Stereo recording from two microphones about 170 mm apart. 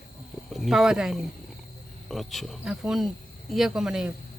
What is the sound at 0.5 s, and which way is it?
Speech, centre (ahead or behind).